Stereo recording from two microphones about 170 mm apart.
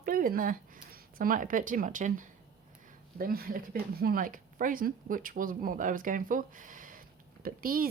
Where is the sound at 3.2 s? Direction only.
60° right (ahead or behind).